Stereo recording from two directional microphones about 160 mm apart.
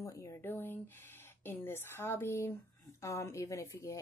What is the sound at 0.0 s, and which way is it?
Speech, 20° left (ahead or behind).